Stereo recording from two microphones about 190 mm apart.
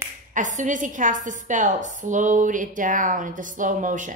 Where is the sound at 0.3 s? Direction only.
40° right (ahead or behind).